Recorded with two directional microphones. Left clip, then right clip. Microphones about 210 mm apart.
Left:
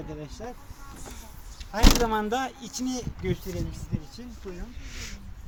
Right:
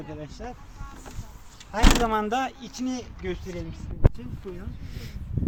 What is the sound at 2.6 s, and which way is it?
Speech, 5° right (ahead or behind).